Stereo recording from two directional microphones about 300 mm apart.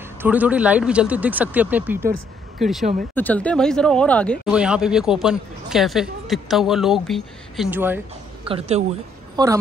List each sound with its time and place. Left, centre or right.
0.2 s speech: centre
8.5 s a woman's voice: centre